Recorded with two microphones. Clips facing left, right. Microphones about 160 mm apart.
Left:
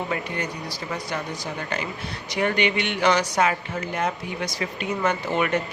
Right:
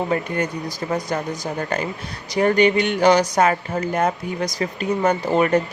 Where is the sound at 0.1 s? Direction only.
45° right (ahead or behind).